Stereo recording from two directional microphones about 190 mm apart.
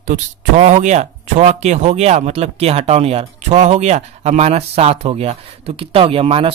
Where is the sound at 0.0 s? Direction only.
40° right (ahead or behind).